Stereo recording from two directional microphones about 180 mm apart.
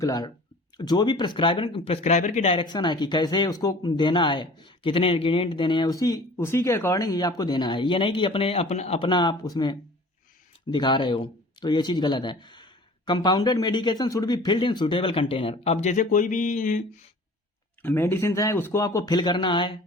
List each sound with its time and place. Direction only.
0.0 s speech: 20° left (ahead or behind); by 16.8 s 45° left (ahead or behind)
17.8 s speech: 15° left (ahead or behind)